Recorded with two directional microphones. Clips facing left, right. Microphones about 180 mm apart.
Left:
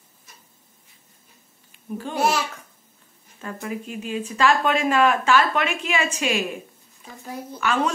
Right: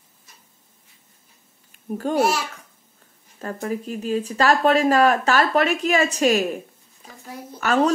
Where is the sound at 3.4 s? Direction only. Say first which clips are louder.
Right 4 dB; 40° right (ahead or behind).